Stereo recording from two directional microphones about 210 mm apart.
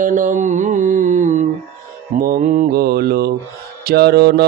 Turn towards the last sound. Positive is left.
turn(degrees=-50)  # may be behind; listen again after turning